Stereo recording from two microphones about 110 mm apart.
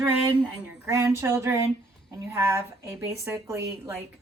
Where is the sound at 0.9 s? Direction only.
30° right (ahead or behind).